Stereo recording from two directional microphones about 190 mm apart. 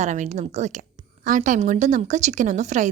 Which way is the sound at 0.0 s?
40° right (ahead or behind).